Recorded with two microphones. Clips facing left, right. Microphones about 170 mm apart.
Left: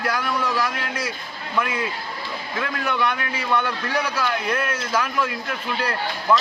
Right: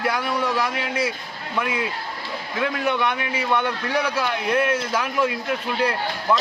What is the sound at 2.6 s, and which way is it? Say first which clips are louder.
A man's voice: right 2 dB; 20° right (ahead or behind).